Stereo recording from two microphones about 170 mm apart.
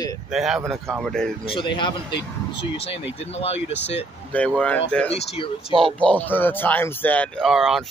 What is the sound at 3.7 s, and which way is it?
Speech, 90° left.